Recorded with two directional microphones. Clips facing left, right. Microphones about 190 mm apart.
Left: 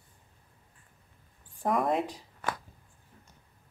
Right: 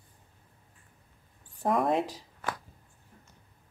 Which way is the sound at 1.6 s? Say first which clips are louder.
Right 1 dB; centre (ahead or behind).